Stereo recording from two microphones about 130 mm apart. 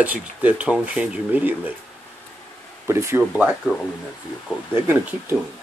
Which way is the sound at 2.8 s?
20° right (ahead or behind).